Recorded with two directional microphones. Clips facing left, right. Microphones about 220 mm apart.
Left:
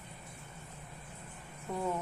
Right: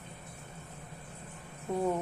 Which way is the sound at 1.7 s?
20° right (ahead or behind).